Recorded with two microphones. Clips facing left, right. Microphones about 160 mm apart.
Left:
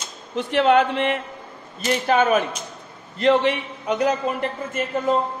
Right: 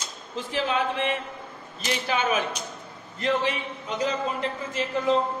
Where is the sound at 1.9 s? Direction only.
45° left (ahead or behind).